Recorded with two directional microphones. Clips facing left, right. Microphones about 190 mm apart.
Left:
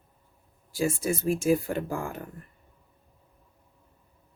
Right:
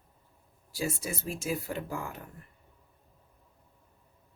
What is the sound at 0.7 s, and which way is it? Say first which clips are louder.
Speech: left 7 dB; 50° left (ahead or behind).